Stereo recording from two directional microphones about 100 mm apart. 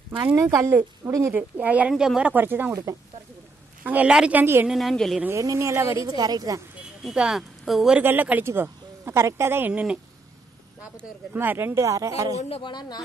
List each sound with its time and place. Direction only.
0.4 s a woman's voice: 30° right (ahead or behind)
1.3 s speech: 15° right (ahead or behind)
2.7 s a woman's voice: 35° right (ahead or behind)
3.8 s speech: 15° right (ahead or behind)
4.6 s a woman's voice: centre (ahead or behind)
5.3 s a woman's voice: 30° right (ahead or behind)
6.0 s a woman's voice: 40° right (ahead or behind)
7.0 s speech: 5° right (ahead or behind)
8.0 s a woman's voice: 20° right (ahead or behind)
11.3 s a woman's voice: 20° right (ahead or behind)
12.4 s a woman's voice: 75° left (ahead or behind)
12.6 s a woman's voice: 45° left (ahead or behind)